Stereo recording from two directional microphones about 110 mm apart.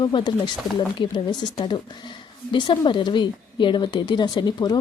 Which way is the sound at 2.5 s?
45° left (ahead or behind).